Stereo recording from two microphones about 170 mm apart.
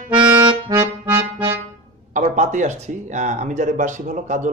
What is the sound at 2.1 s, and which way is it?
Speech, 45° right (ahead or behind).